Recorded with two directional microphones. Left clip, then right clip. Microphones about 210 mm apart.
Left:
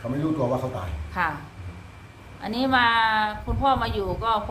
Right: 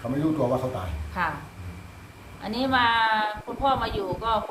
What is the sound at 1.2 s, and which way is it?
Speech, 25° left (ahead or behind).